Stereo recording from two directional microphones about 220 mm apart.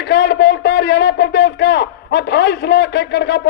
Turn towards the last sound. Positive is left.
turn(degrees=50)  # may be behind; listen again after turning